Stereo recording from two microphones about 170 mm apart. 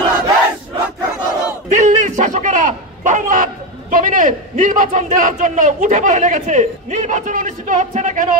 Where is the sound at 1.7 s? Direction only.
45° right (ahead or behind).